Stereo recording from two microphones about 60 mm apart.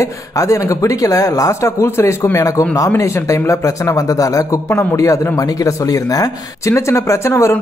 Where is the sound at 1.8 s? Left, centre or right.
Left.